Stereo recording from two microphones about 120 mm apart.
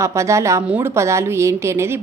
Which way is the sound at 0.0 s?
25° right (ahead or behind).